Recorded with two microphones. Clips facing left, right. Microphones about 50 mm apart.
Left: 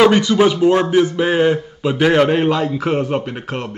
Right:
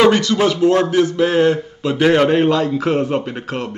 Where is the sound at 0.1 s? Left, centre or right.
Centre.